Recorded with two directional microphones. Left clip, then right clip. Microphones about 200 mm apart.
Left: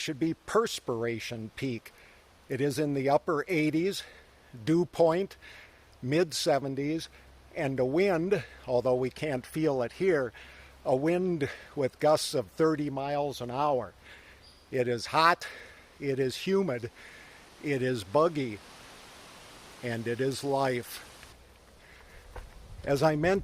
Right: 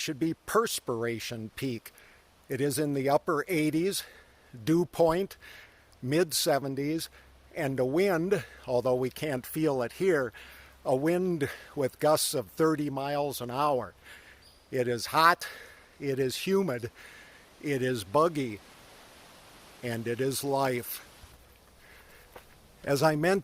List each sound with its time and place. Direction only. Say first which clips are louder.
0.0 s speech: even; 25° right (ahead or behind)
19.8 s speech: even; 30° right (ahead or behind)
22.4 s a sound: left 2 dB; 25° right (ahead or behind)